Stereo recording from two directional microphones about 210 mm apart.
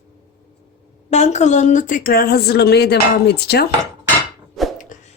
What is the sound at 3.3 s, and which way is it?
Dishes, 50° left (ahead or behind).